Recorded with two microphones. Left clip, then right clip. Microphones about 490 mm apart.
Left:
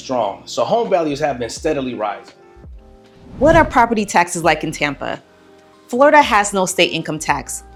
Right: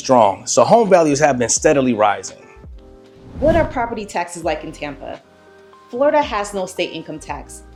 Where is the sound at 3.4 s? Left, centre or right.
Left.